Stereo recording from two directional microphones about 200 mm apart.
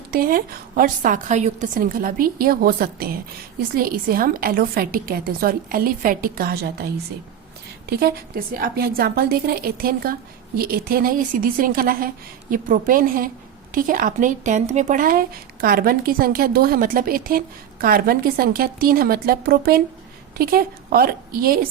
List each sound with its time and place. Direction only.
0.1 s a woman's voice: 45° right (ahead or behind)